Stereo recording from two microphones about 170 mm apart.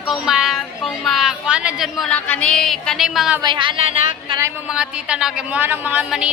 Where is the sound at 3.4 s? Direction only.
30° right (ahead or behind).